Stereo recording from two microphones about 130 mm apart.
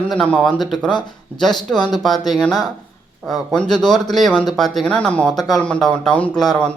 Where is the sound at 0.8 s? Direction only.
35° left (ahead or behind).